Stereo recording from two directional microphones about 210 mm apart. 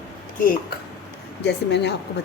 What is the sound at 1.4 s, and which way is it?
Speech, 55° left (ahead or behind).